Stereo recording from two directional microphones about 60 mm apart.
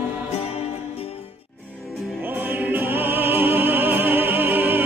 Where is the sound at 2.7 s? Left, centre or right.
Right.